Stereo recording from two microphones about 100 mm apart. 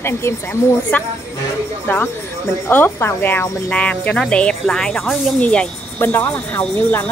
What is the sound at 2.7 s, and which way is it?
Speech, 20° left (ahead or behind).